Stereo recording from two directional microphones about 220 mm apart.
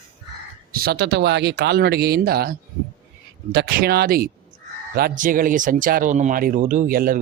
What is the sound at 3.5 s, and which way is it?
Speech, 45° right (ahead or behind).